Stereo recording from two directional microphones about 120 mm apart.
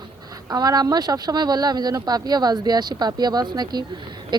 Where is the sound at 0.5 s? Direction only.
35° right (ahead or behind).